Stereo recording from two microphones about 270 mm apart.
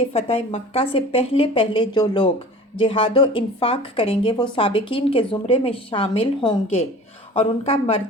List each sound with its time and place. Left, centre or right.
0.1 s a woman's voice: left